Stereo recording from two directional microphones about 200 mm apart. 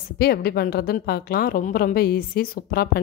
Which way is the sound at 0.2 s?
50° left (ahead or behind).